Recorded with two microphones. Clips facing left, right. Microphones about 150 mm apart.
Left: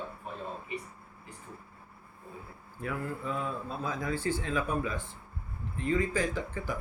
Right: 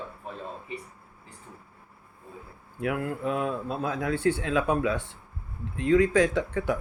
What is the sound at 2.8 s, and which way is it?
A man's voice, 70° right (ahead or behind).